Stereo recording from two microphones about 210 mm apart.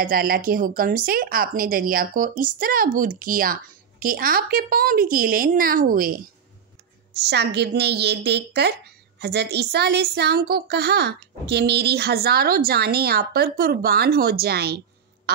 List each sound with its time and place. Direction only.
0.0 s a woman's voice: 45° right (ahead or behind)
7.2 s a woman's voice: 50° right (ahead or behind)